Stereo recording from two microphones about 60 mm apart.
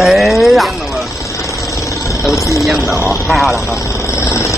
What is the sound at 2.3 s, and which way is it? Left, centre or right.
Speech, left.